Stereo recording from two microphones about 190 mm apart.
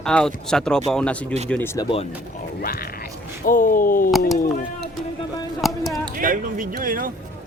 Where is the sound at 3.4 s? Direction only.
45° left (ahead or behind).